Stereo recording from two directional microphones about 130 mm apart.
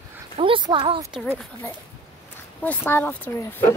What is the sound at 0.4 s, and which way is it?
Speech, 40° right (ahead or behind).